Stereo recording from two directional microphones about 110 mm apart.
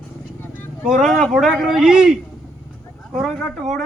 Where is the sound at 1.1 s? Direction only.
Centre (ahead or behind).